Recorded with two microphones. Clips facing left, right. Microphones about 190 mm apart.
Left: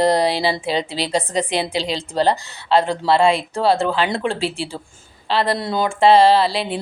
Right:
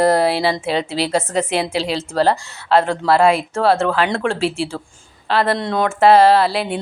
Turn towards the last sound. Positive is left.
turn(degrees=0)  # may be behind; listen again after turning